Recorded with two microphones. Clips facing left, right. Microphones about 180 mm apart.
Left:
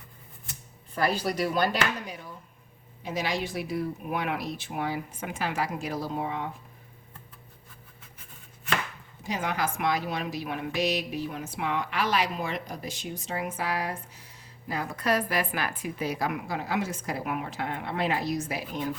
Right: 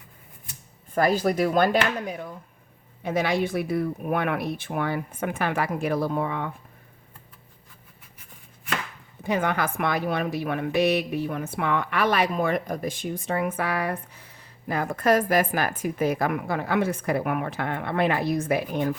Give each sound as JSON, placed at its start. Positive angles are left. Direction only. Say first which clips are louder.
{"t": 0.9, "sound": "a woman's voice", "louder": "right 6 dB", "side_deg": -50}
{"t": 9.2, "sound": "a woman's voice", "louder": "right 5 dB", "side_deg": -55}